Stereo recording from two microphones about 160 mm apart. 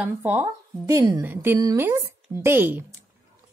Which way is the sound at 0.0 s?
10° right (ahead or behind).